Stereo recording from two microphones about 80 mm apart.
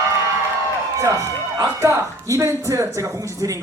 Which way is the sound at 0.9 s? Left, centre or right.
Right.